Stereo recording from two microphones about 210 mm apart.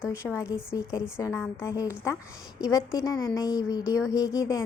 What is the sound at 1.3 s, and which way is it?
A woman's voice, 10° left (ahead or behind).